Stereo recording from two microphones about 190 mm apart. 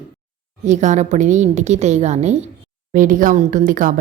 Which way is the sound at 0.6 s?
40° right (ahead or behind).